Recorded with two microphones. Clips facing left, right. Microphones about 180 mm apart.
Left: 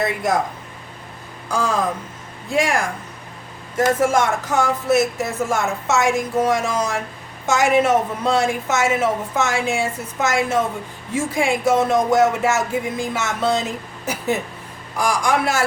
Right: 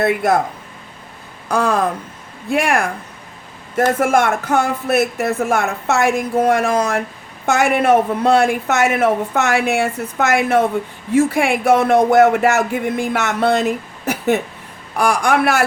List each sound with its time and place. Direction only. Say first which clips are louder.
0.0 s speech: right 5 dB; 60° right (ahead or behind)
1.5 s speech: right 4 dB; 60° right (ahead or behind)